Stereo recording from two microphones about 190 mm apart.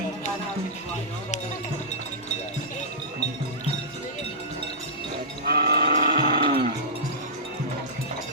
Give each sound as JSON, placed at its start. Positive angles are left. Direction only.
{"t": 5.5, "sound": "livestock", "side_deg": -55}